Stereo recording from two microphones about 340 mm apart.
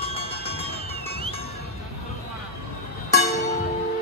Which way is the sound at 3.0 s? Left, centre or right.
Centre.